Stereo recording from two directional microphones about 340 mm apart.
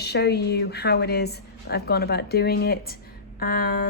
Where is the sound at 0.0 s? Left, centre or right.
Left.